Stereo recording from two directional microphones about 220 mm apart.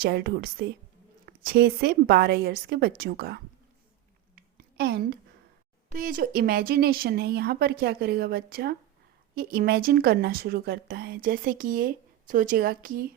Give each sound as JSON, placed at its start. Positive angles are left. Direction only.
{"t": 0.0, "sound": "a woman's voice", "side_deg": -45}
{"t": 4.4, "sound": "a sound", "side_deg": -45}
{"t": 5.9, "sound": "a woman's voice", "side_deg": -40}